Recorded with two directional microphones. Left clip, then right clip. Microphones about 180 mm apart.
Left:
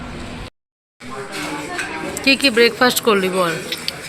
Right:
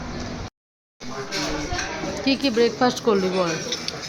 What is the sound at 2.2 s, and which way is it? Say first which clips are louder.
Speech: left 7 dB; centre (ahead or behind).